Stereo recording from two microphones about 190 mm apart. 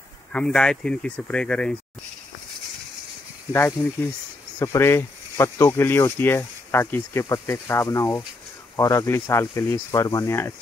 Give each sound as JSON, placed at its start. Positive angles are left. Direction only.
{"t": 0.3, "sound": "speech", "side_deg": 5}
{"t": 3.8, "sound": "speech", "side_deg": 5}